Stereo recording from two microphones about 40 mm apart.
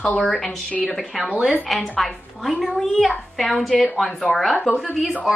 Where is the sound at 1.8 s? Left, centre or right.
Centre.